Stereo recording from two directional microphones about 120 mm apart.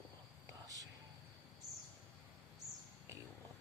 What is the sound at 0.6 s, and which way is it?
Whispering, 30° right (ahead or behind).